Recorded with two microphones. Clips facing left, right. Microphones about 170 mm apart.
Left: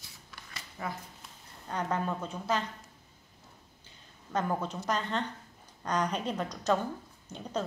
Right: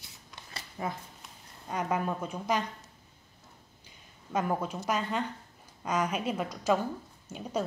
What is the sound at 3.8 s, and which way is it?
A woman's voice, 10° right (ahead or behind).